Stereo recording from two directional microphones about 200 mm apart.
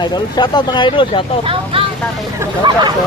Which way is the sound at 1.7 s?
25° right (ahead or behind).